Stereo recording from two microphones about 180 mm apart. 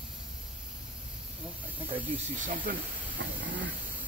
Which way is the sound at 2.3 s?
50° right (ahead or behind).